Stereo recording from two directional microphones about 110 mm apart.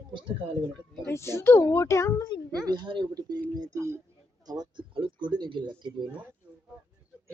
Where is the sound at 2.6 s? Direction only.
45° right (ahead or behind); by 4.0 s 25° right (ahead or behind).